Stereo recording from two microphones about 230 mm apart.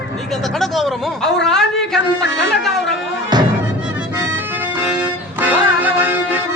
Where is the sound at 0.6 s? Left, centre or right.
Centre.